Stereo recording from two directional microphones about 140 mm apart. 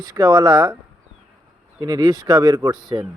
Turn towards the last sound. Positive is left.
turn(degrees=-30)  # may be behind; listen again after turning